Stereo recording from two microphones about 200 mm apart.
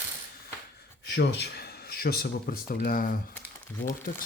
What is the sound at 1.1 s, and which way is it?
Speech, 55° left (ahead or behind).